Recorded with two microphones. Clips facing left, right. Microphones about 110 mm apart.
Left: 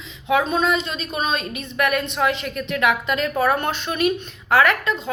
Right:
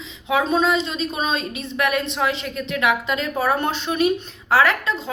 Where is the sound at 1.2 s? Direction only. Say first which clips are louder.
Left 3 dB; 55° left (ahead or behind).